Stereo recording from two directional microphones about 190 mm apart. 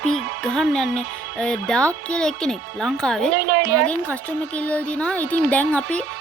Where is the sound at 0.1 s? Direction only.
Centre (ahead or behind).